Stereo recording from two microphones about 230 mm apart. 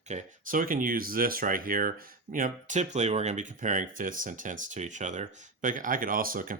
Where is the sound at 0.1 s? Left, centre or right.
Right.